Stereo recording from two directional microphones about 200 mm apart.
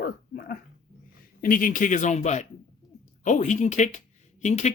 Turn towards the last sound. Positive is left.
turn(degrees=35)  # may be behind; listen again after turning